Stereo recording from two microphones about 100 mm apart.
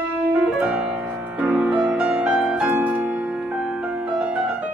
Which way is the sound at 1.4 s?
15° right (ahead or behind).